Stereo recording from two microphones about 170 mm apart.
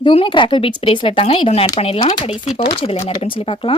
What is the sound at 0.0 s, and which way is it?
Speech, 30° left (ahead or behind).